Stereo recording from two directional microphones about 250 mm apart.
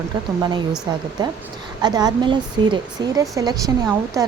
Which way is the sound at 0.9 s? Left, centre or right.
Centre.